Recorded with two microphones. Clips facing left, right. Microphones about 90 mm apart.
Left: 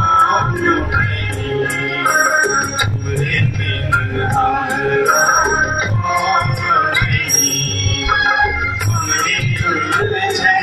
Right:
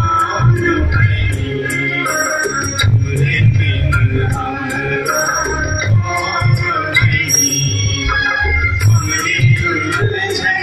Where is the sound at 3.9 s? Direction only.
35° left (ahead or behind).